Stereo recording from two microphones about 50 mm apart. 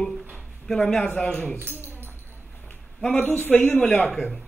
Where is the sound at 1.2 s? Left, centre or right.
Left.